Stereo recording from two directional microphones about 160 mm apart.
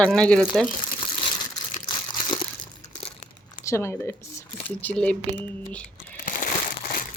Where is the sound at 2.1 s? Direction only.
30° left (ahead or behind).